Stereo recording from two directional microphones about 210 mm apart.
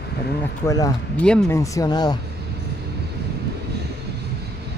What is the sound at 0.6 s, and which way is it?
Speech, 15° left (ahead or behind).